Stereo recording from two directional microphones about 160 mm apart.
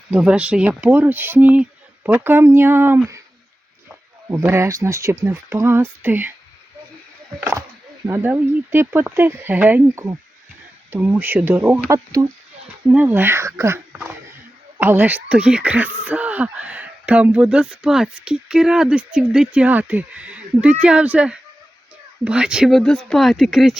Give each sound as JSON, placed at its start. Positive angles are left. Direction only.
{"t": 0.1, "sound": "speech", "side_deg": -5}
{"t": 4.3, "sound": "speech", "side_deg": -15}
{"t": 8.0, "sound": "speech", "side_deg": -15}
{"t": 13.9, "sound": "a sound", "side_deg": -10}
{"t": 14.8, "sound": "speech", "side_deg": -10}